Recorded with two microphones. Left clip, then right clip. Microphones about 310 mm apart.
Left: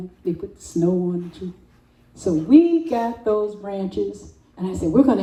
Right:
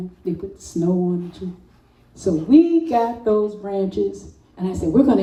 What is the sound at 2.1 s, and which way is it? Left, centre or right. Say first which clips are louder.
Speech: even; left.